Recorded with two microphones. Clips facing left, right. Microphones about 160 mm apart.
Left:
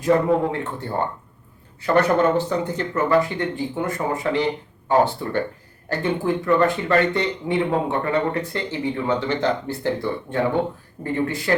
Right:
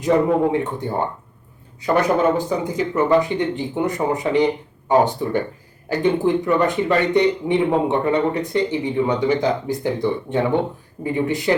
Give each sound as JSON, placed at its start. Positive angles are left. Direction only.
{"t": 0.1, "sound": "speech", "side_deg": -15}